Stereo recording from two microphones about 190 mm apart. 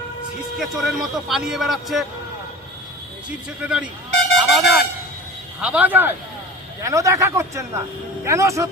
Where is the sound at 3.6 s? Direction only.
5° right (ahead or behind).